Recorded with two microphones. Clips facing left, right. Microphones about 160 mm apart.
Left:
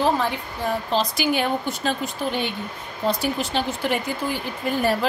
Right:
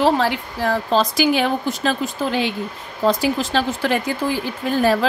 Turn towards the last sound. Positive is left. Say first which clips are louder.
# right 4 dB
turn(degrees=-90)